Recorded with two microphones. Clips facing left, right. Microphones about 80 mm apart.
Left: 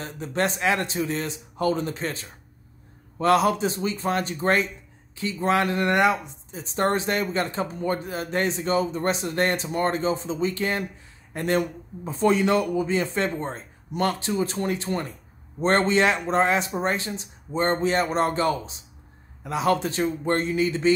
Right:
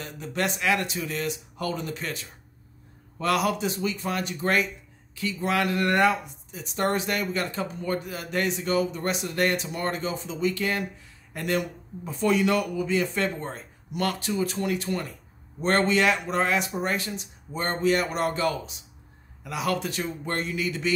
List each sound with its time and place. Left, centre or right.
0.0 s a man's voice: left
6.5 s a man's voice: left